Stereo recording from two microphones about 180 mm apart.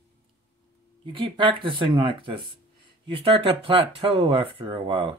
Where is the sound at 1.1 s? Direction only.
30° right (ahead or behind).